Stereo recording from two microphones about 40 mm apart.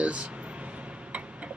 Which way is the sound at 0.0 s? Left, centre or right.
Right.